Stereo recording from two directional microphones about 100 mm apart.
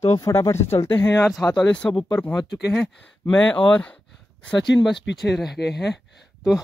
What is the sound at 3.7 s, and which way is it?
Speech, 10° left (ahead or behind).